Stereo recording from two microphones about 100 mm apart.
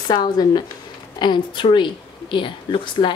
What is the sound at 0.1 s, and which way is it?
A woman's voice, 45° left (ahead or behind).